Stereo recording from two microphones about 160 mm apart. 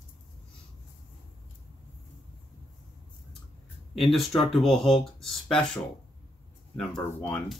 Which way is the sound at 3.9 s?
Centre (ahead or behind).